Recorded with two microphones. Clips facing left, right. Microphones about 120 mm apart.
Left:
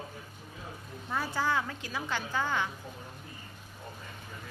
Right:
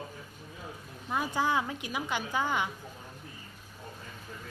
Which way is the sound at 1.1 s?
15° right (ahead or behind).